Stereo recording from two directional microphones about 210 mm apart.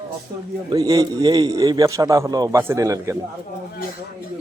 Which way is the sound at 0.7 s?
20° right (ahead or behind).